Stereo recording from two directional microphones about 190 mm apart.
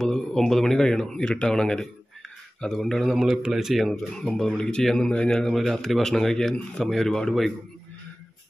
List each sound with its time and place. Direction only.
0.0 s speech: centre (ahead or behind)